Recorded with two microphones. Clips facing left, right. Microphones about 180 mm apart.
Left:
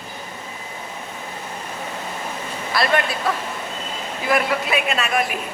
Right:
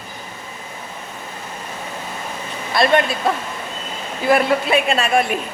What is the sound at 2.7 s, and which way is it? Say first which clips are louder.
Speech: right 5 dB; 25° right (ahead or behind).